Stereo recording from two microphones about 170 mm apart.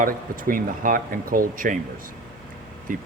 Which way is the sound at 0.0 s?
55° right (ahead or behind).